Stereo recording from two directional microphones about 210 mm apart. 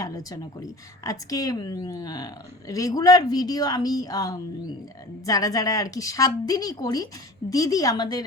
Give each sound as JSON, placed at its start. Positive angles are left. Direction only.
{"t": 0.0, "sound": "a woman's voice", "side_deg": 15}